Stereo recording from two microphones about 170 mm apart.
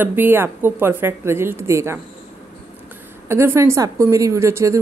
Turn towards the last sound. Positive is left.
turn(degrees=-15)  # may be behind; listen again after turning